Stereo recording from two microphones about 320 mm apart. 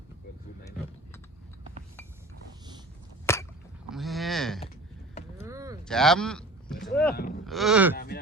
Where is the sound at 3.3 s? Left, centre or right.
Centre.